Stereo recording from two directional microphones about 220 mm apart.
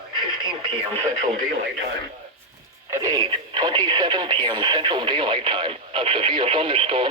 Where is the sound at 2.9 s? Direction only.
15° right (ahead or behind).